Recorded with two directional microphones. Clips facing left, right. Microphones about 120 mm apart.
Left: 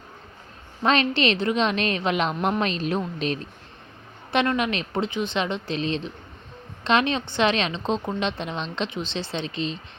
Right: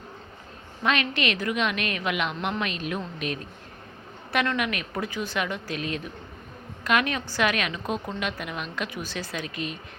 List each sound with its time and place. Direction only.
0.8 s a woman's voice: 30° left (ahead or behind)